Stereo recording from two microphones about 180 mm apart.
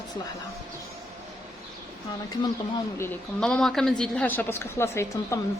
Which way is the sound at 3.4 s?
5° left (ahead or behind).